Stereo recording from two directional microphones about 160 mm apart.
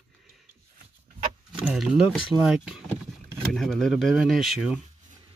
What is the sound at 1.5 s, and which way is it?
Speech, 5° right (ahead or behind).